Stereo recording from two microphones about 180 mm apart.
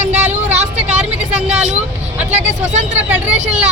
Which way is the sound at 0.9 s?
40° right (ahead or behind).